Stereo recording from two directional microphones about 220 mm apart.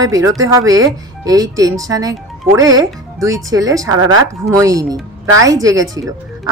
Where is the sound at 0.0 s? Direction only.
15° right (ahead or behind).